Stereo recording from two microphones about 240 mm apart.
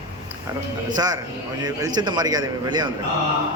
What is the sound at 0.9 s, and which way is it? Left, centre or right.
Speech, centre.